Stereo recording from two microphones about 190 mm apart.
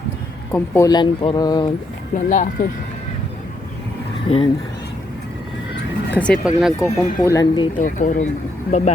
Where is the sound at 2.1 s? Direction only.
40° left (ahead or behind).